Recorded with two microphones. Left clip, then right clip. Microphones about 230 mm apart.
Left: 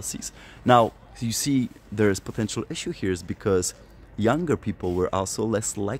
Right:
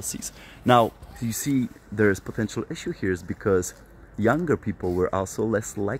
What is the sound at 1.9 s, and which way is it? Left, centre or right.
Speech, centre.